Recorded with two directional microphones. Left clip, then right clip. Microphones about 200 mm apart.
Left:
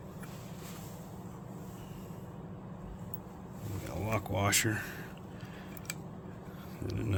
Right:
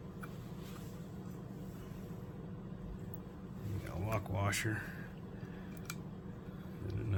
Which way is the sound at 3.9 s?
50° left (ahead or behind).